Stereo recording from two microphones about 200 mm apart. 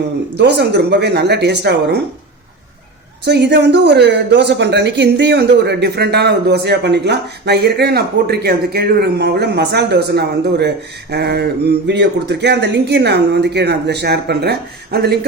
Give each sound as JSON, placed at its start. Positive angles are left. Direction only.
{"t": 0.3, "sound": "speech", "side_deg": -60}
{"t": 3.2, "sound": "speech", "side_deg": -60}